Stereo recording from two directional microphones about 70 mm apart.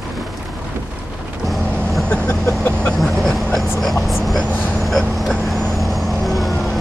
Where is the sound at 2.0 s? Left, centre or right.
Centre.